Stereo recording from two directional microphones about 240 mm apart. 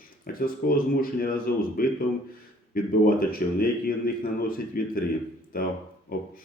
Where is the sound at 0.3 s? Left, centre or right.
Left.